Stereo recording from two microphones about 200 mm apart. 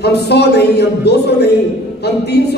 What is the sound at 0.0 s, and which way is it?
A woman's voice, 55° left (ahead or behind).